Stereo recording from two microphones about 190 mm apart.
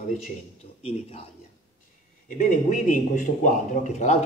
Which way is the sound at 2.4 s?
45° left (ahead or behind).